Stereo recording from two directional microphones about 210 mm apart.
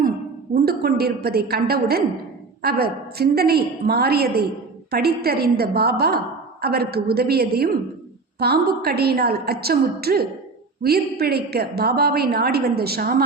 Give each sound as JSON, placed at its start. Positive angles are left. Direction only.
{"t": 0.5, "sound": "a woman's voice", "side_deg": -45}